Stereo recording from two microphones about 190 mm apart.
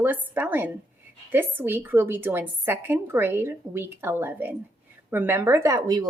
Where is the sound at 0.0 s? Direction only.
10° right (ahead or behind).